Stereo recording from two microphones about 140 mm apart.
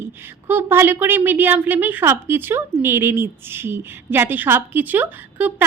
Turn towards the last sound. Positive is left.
turn(degrees=-10)  # may be behind; listen again after turning